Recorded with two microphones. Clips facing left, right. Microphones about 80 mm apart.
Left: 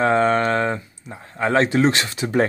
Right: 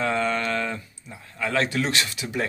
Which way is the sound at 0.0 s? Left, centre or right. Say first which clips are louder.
Left 7 dB; left.